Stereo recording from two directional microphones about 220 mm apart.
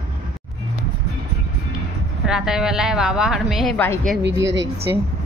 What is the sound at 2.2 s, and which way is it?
A woman's voice, centre (ahead or behind).